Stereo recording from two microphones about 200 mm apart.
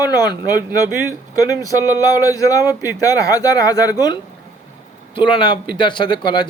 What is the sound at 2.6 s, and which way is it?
Speech, 10° right (ahead or behind).